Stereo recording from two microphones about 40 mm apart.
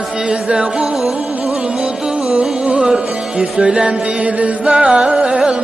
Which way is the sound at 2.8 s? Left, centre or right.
Right.